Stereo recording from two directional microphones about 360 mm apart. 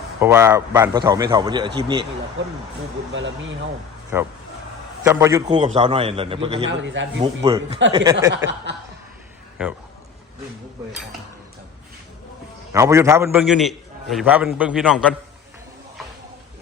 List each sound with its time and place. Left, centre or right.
0.2 s a man's voice: centre
3.1 s a man's voice: right
4.1 s a man's voice: centre
6.7 s a man's voice: right
7.4 s a man's voice: centre
8.3 s a man's voice: right
12.7 s a man's voice: centre